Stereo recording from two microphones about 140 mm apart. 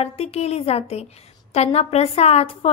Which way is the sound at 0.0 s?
50° left (ahead or behind).